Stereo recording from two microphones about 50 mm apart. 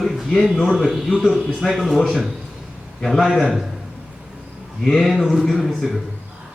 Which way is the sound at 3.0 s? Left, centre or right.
Centre.